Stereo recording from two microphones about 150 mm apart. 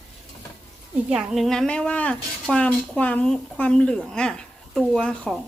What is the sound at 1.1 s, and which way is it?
Speech, centre (ahead or behind).